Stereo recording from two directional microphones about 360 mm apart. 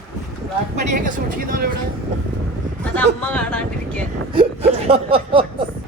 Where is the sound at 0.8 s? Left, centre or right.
Right.